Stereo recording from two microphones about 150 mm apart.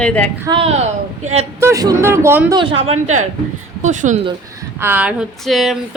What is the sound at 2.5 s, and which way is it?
A woman's voice, 40° right (ahead or behind).